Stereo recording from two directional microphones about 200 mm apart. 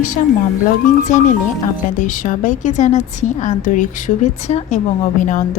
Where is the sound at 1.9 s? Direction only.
40° left (ahead or behind).